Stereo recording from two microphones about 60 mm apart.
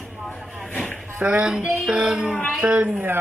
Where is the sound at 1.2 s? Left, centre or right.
Centre.